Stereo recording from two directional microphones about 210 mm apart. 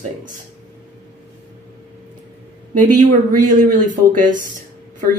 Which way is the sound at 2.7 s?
40° right (ahead or behind).